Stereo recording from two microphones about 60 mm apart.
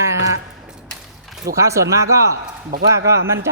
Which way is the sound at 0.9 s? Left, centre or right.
Centre.